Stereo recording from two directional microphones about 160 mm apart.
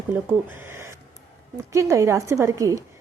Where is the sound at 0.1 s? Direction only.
15° right (ahead or behind).